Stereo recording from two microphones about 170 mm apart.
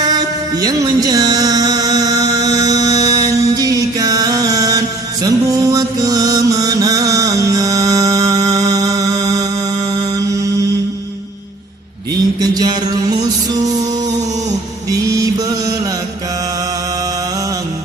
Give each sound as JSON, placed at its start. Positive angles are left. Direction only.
{"t": 0.0, "sound": "music", "side_deg": -20}
{"t": 5.2, "sound": "mantra", "side_deg": -20}
{"t": 12.4, "sound": "music", "side_deg": -25}
{"t": 14.8, "sound": "mantra", "side_deg": -20}